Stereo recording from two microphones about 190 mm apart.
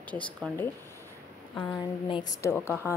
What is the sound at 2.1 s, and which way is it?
Speech, 20° left (ahead or behind).